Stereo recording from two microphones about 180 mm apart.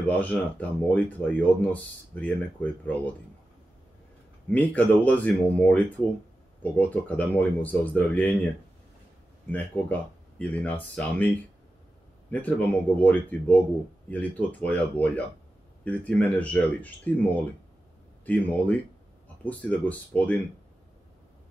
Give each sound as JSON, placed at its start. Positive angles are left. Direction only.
{"t": 0.0, "sound": "speech", "side_deg": 10}
{"t": 4.5, "sound": "speech", "side_deg": 10}
{"t": 9.5, "sound": "speech", "side_deg": 10}